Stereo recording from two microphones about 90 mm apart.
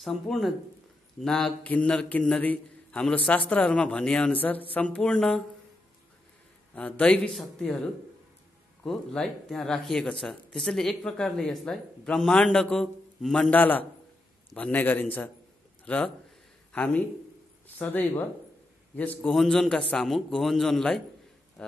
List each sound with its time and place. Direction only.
0.0 s a man's voice: centre (ahead or behind)
6.7 s a man's voice: 15° left (ahead or behind)
13.5 s a man's voice: 20° left (ahead or behind)
19.3 s speech: 5° left (ahead or behind)